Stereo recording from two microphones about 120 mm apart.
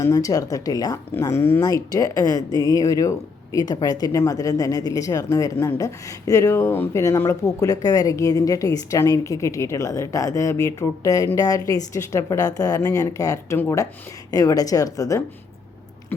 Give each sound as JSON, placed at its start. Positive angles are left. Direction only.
{"t": 0.0, "sound": "speech", "side_deg": 30}